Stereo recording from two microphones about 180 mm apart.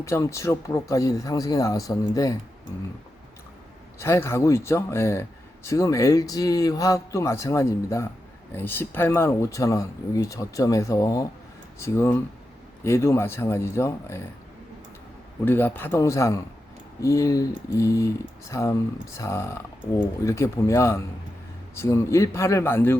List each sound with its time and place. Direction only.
0.0 s speech: 15° left (ahead or behind)
4.0 s speech: 15° left (ahead or behind)
15.4 s speech: 10° left (ahead or behind)